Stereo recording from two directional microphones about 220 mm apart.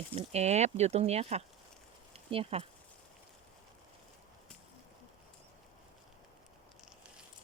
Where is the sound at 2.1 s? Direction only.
25° right (ahead or behind).